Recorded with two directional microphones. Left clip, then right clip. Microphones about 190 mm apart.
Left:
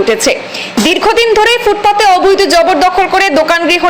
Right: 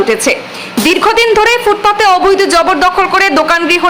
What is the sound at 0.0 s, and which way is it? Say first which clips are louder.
A man's voice: left 1 dB; 10° left (ahead or behind).